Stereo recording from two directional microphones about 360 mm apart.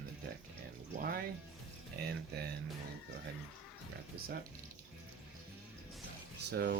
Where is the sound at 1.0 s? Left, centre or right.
Right.